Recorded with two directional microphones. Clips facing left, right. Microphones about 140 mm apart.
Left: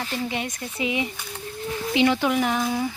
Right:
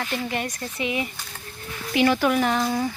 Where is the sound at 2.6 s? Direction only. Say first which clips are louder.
Right 1 dB; 5° left (ahead or behind).